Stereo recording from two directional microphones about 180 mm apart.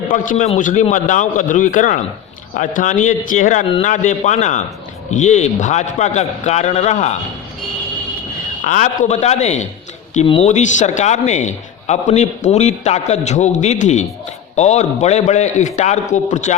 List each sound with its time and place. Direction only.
0.1 s a man's voice: 45° left (ahead or behind)
8.6 s a man's voice: 45° left (ahead or behind)